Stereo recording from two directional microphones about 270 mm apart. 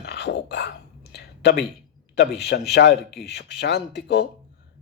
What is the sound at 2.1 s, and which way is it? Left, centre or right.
Speech, left.